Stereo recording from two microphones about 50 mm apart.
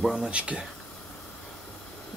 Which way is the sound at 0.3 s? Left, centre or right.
Right.